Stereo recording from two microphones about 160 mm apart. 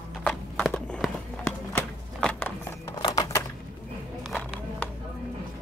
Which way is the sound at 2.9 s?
25° left (ahead or behind).